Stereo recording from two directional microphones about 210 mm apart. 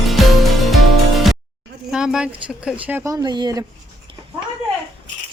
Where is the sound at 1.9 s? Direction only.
5° right (ahead or behind); by 3.6 s 20° right (ahead or behind).